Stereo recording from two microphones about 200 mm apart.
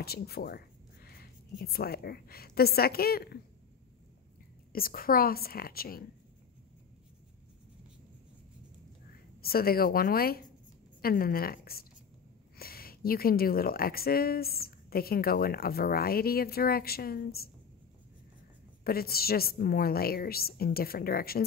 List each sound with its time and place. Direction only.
0.0 s speech: 50° left (ahead or behind)
4.7 s speech: 45° left (ahead or behind)
9.4 s speech: 50° left (ahead or behind)
18.9 s speech: 50° left (ahead or behind)